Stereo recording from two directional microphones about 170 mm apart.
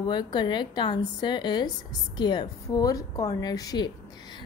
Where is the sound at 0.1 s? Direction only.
25° left (ahead or behind).